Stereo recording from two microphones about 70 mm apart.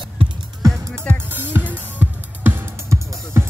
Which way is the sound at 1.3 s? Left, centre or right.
Right.